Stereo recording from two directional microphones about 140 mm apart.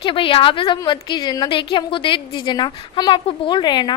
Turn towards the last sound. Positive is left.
turn(degrees=30)  # may be behind; listen again after turning